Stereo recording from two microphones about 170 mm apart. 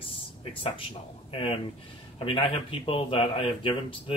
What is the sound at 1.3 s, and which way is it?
Speech, 35° left (ahead or behind).